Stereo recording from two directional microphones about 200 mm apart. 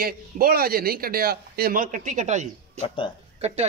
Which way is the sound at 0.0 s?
45° right (ahead or behind).